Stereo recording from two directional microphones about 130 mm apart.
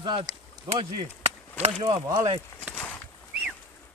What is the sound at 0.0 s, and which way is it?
Speech, 45° right (ahead or behind).